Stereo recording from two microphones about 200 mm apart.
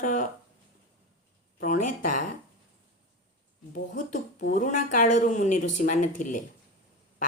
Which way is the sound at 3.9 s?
40° left (ahead or behind).